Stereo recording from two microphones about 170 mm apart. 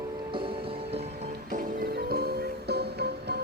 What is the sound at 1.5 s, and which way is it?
Music, 55° right (ahead or behind).